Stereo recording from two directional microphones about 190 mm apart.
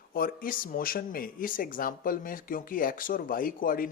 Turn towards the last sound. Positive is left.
turn(degrees=50)  # may be behind; listen again after turning